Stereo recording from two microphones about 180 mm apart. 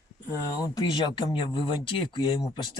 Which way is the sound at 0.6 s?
25° left (ahead or behind).